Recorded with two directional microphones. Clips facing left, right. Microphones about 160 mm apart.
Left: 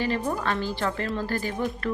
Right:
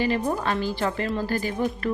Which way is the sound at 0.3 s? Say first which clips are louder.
Right 2 dB; 20° right (ahead or behind).